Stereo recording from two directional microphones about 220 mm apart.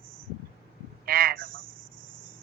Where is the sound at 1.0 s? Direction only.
40° right (ahead or behind).